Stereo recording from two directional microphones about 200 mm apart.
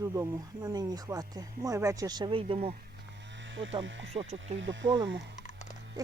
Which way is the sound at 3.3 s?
65° right (ahead or behind).